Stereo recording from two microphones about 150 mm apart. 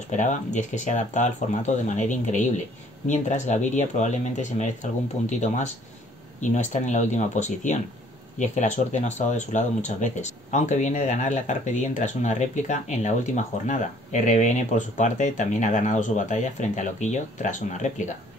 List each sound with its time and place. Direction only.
0.1 s speech: 55° left (ahead or behind)